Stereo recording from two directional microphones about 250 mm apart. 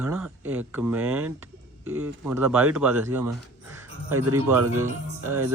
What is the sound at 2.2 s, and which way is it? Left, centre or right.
Speech, centre.